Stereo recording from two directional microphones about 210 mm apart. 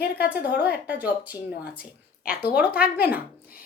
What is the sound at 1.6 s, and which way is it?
Speech, 45° left (ahead or behind).